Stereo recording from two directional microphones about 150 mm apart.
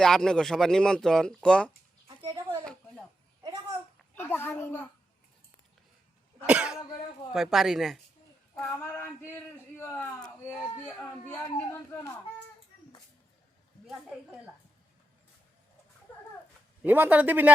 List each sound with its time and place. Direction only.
0.0 s speech: 5° left (ahead or behind)
2.2 s a sound: 35° right (ahead or behind)
2.6 s a sound: 5° left (ahead or behind)
3.4 s babbling: 30° right (ahead or behind)
4.1 s a child's voice: 10° left (ahead or behind)
6.4 s speech: 5° right (ahead or behind)
8.5 s a man's voice: 15° left (ahead or behind)
11.5 s a man's voice: 15° left (ahead or behind)
16.8 s speech: 10° right (ahead or behind)